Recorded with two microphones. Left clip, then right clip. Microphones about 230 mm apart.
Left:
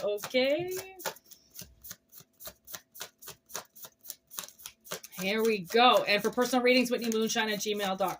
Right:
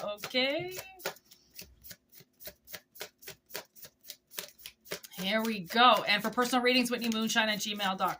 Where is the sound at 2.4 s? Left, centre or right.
Centre.